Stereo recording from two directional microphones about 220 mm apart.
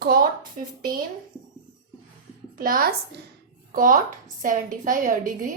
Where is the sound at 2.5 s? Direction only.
40° right (ahead or behind).